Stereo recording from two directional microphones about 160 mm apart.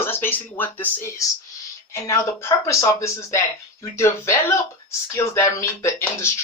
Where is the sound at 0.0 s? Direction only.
15° left (ahead or behind).